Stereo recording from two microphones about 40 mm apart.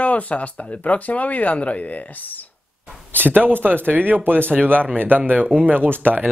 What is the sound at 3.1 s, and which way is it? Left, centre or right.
Speech, right.